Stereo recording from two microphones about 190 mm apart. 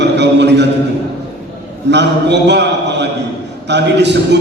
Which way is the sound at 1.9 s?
65° right (ahead or behind).